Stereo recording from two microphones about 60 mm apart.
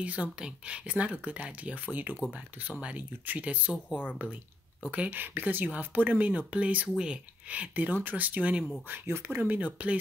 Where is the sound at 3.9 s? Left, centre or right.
Left.